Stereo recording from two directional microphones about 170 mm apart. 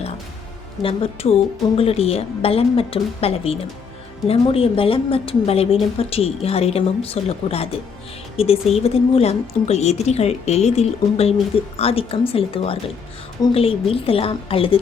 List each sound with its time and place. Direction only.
0.8 s a woman's voice: 35° left (ahead or behind)